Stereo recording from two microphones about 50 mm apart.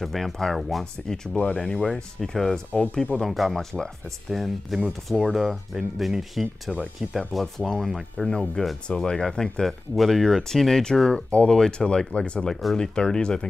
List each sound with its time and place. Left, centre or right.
0.0 s speech: centre
1.0 s speech: centre
2.7 s speech: left
3.2 s speech: centre